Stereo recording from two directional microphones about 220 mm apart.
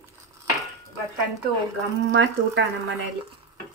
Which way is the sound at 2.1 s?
55° right (ahead or behind).